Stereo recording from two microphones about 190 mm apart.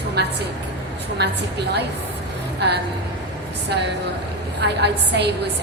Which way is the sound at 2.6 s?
60° right (ahead or behind).